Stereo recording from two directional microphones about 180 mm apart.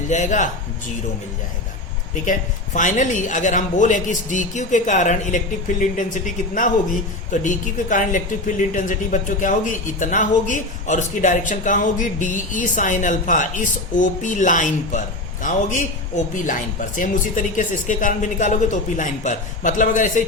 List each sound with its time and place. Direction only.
0.1 s speech: 40° left (ahead or behind)
2.7 s speech: 45° left (ahead or behind)